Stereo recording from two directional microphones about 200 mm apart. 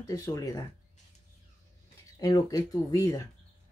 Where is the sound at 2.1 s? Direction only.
20° left (ahead or behind).